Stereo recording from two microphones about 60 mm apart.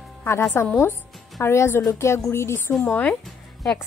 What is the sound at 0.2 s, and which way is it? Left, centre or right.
A woman's voice, left.